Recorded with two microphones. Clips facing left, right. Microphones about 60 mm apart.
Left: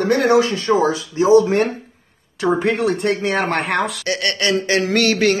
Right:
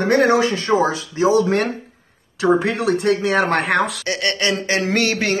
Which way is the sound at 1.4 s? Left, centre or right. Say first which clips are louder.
Left 1 dB; right.